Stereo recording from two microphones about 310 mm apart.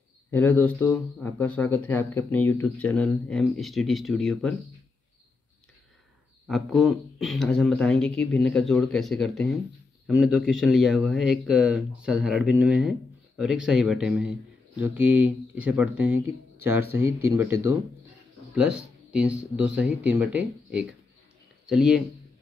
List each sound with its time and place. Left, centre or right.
0.3 s speech: centre
6.4 s speech: centre